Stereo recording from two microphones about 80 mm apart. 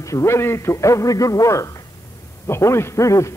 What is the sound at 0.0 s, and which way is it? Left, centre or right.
A man's voice, left.